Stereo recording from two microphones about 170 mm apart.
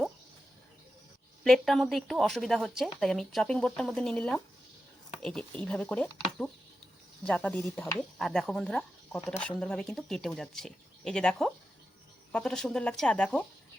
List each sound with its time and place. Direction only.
1.5 s a woman's voice: centre (ahead or behind)